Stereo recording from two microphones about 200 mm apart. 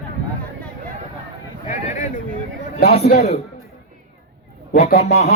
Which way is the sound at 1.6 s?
35° left (ahead or behind).